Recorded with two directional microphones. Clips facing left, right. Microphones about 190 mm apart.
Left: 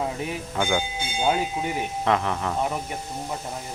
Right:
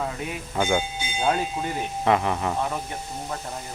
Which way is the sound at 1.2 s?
10° left (ahead or behind).